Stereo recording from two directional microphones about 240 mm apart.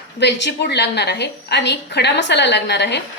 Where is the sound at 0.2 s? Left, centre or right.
Left.